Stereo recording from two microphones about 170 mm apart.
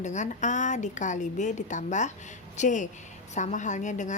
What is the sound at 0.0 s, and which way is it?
A woman's voice, 45° left (ahead or behind).